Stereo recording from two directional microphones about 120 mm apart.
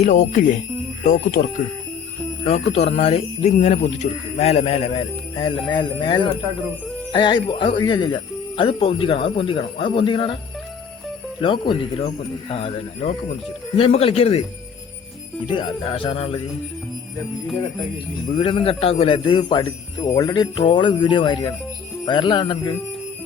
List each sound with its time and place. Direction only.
0.0 s speech: 90° left
2.5 s speech: 65° left (ahead or behind); by 10.3 s 45° left (ahead or behind)
11.3 s speech: 45° left (ahead or behind)
15.4 s speech: 45° left (ahead or behind)
18.3 s a man's voice: 45° left (ahead or behind)